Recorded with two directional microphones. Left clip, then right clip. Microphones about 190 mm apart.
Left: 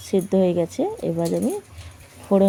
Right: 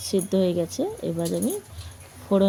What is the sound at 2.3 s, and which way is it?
Speech, 15° left (ahead or behind).